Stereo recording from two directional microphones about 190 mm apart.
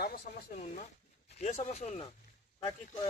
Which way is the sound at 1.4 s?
35° left (ahead or behind).